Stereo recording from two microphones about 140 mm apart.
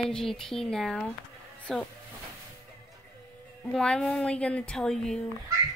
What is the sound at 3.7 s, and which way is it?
A woman's voice, 5° left (ahead or behind).